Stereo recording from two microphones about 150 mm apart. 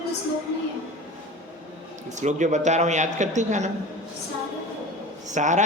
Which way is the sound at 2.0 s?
50° right (ahead or behind).